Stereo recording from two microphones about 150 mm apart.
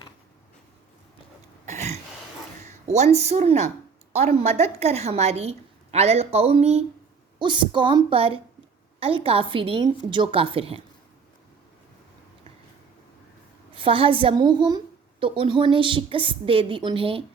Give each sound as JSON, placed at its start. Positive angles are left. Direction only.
{"t": 1.6, "sound": "a sound", "side_deg": -50}
{"t": 2.6, "sound": "a woman's voice", "side_deg": -50}
{"t": 7.3, "sound": "a woman's voice", "side_deg": -30}
{"t": 13.7, "sound": "a woman's voice", "side_deg": -35}